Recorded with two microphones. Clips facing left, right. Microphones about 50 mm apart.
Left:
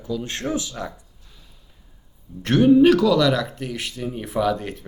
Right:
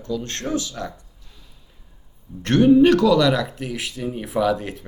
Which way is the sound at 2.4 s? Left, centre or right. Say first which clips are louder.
Right 1 dB; centre.